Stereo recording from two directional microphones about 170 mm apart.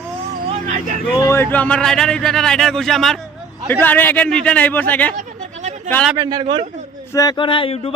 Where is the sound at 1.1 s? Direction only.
15° left (ahead or behind).